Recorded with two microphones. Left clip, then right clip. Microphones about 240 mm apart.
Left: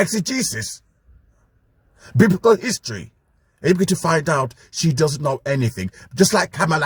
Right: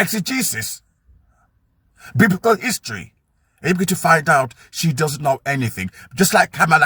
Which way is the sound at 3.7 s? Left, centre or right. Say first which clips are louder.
Left 2 dB; centre.